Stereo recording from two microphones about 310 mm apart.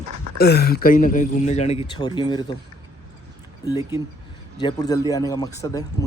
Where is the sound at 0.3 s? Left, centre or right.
Left; by 2.6 s centre.